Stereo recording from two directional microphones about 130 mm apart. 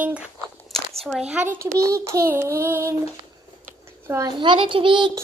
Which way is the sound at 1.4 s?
25° right (ahead or behind).